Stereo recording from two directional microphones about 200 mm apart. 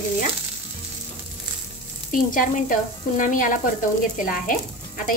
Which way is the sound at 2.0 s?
40° left (ahead or behind).